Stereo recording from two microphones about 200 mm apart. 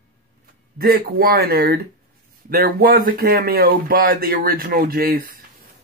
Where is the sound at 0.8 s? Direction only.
50° right (ahead or behind).